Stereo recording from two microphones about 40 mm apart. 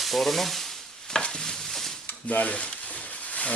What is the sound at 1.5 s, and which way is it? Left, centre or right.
Stir, centre.